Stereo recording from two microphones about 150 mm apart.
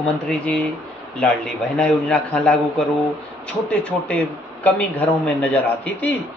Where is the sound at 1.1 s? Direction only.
5° left (ahead or behind).